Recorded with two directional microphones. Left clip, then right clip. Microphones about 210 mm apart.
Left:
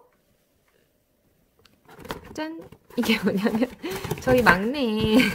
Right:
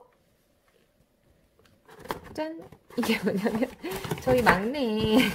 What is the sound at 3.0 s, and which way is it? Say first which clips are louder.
Speech: left 3 dB; 20° left (ahead or behind).